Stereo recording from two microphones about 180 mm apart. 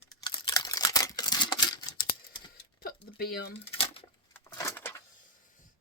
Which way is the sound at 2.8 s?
55° left (ahead or behind).